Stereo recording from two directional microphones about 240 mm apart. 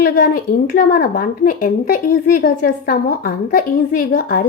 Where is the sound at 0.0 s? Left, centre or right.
Left.